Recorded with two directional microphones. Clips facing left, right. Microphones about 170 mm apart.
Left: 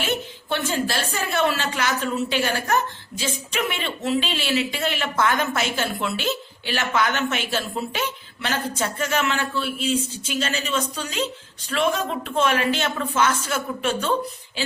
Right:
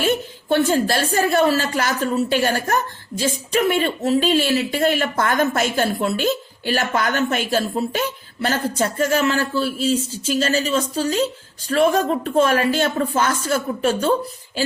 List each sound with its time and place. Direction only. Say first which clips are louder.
0.5 s a woman's voice: right 7 dB; 45° right (ahead or behind)